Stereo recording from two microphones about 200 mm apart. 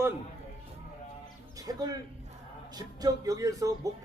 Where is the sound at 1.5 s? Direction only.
20° right (ahead or behind).